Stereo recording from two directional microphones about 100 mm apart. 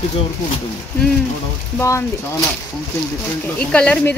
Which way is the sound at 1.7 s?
30° left (ahead or behind).